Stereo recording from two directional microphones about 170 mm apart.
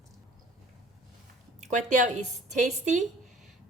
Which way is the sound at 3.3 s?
Centre (ahead or behind).